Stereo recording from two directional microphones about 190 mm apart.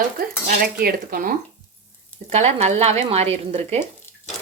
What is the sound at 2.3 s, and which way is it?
Speech, 35° right (ahead or behind).